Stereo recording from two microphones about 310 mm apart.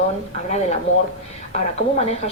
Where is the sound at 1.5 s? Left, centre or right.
Left.